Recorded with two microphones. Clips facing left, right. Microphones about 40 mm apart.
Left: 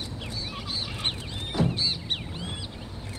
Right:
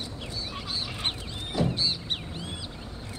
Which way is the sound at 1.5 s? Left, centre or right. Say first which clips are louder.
Even; left.